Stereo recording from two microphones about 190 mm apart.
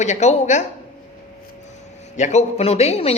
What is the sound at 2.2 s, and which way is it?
Speech, 40° left (ahead or behind).